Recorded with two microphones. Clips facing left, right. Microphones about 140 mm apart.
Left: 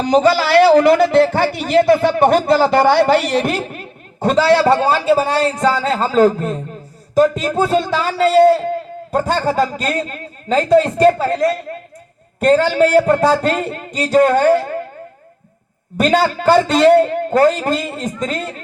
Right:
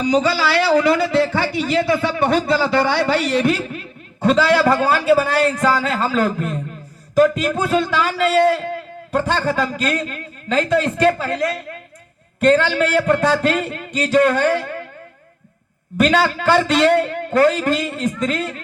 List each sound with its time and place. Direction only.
0.0 s a man's voice: 50° left (ahead or behind)
16.0 s a man's voice: 35° left (ahead or behind)